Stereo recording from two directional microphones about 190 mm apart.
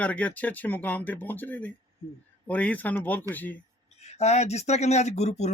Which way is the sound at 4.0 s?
35° left (ahead or behind).